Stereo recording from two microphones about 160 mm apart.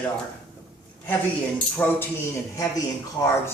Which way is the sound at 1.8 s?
10° left (ahead or behind).